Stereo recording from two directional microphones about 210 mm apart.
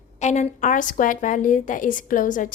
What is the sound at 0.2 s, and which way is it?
A woman's voice, 35° left (ahead or behind).